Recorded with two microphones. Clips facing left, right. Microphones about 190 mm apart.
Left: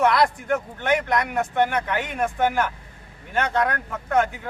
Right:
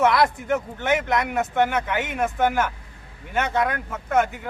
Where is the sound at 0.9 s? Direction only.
20° right (ahead or behind).